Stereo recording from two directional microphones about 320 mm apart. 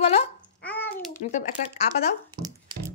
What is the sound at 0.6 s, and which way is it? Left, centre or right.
Babbling, centre.